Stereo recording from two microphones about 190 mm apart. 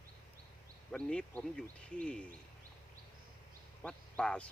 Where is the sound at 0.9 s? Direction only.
5° left (ahead or behind).